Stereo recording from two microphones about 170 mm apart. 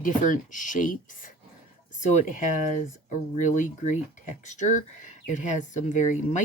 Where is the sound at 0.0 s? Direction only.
50° left (ahead or behind).